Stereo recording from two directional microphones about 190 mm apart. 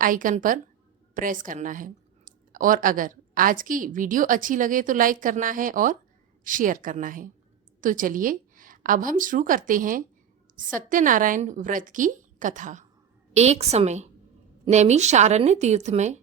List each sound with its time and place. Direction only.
0.0 s a woman's voice: 45° right (ahead or behind)